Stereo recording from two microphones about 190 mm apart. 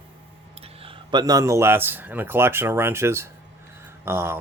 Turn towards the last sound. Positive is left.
turn(degrees=-15)  # may be behind; listen again after turning